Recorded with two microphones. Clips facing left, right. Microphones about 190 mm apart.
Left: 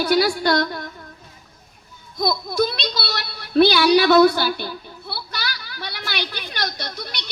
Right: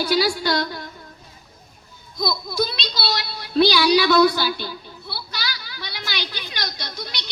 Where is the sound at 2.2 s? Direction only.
55° left (ahead or behind).